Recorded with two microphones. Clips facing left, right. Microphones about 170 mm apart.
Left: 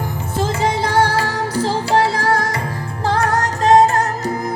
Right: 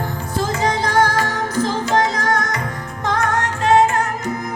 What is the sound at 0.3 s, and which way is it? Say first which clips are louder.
Music: left 1 dB; 25° left (ahead or behind).